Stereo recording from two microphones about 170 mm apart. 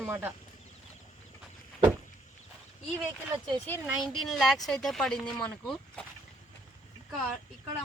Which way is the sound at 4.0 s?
Centre (ahead or behind).